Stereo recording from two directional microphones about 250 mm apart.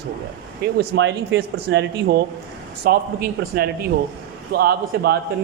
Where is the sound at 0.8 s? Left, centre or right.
Right.